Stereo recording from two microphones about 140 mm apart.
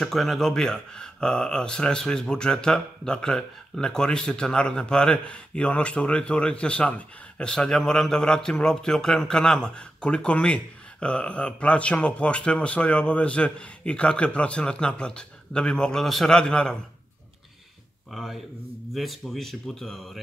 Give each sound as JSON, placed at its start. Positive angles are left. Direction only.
{"t": 0.0, "sound": "speech", "side_deg": 0}
{"t": 18.1, "sound": "speech", "side_deg": 0}